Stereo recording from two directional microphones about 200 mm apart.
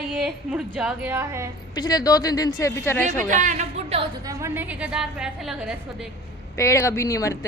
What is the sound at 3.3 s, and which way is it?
Speech, 40° right (ahead or behind).